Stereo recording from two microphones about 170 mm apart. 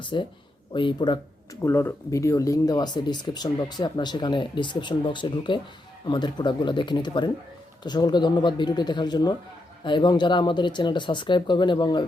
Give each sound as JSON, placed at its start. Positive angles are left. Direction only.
{"t": 0.0, "sound": "speech", "side_deg": 25}
{"t": 1.6, "sound": "speech", "side_deg": 15}